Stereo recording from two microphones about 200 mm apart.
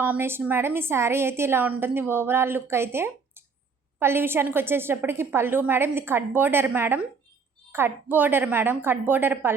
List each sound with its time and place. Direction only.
0.0 s a woman's voice: 10° right (ahead or behind)